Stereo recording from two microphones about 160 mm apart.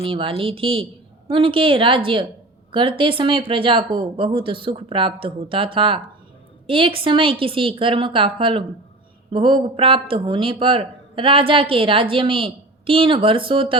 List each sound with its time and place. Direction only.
0.0 s speech: 35° right (ahead or behind)